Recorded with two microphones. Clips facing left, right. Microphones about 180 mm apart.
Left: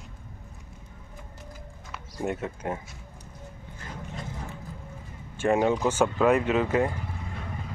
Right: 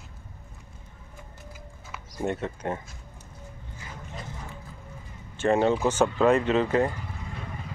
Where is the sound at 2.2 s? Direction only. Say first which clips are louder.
Right 1 dB; 10° left (ahead or behind).